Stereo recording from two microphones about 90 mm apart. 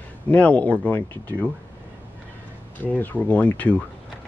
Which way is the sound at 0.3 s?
15° left (ahead or behind).